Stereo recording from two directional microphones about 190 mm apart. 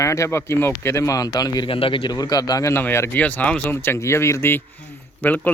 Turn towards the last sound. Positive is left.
turn(degrees=10)  # may be behind; listen again after turning